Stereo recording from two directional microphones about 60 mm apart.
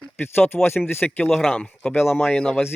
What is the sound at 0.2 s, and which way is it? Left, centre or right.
Speech, left.